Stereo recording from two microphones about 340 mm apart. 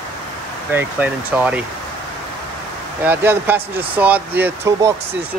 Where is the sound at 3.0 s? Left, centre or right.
Centre.